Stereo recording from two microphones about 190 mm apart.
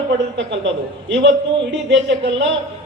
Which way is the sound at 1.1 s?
70° right (ahead or behind).